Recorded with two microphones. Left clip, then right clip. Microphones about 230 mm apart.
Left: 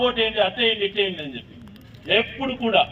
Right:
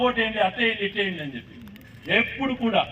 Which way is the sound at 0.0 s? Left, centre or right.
Left.